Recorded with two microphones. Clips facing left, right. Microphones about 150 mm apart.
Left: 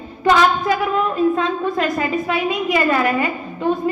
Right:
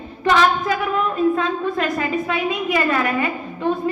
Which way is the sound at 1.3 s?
30° left (ahead or behind).